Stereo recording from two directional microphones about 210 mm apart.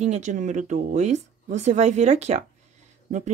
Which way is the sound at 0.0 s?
35° right (ahead or behind).